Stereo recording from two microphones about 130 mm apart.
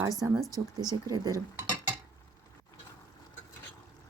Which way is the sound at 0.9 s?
30° right (ahead or behind).